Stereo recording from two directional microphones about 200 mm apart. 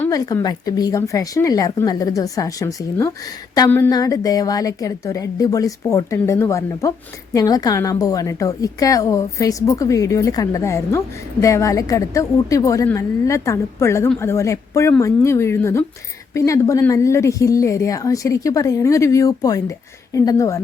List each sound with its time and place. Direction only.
0.0 s a woman's voice: 20° left (ahead or behind)